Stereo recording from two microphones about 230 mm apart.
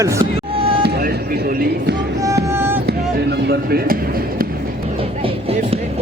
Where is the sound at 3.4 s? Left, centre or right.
Right.